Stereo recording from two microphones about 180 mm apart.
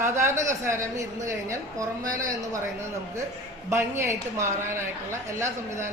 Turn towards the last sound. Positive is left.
turn(degrees=-15)  # may be behind; listen again after turning